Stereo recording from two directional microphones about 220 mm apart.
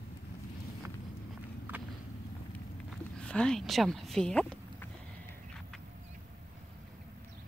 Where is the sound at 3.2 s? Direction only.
5° left (ahead or behind).